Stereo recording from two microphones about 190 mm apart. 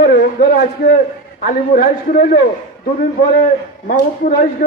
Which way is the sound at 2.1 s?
45° left (ahead or behind).